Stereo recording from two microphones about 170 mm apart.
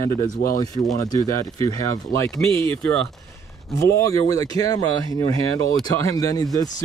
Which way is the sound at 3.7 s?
20° left (ahead or behind).